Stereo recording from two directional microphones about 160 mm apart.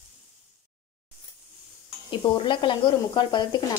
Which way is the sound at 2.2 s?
30° left (ahead or behind).